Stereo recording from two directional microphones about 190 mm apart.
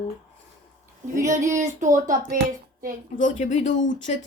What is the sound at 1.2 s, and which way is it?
Speech, 40° right (ahead or behind).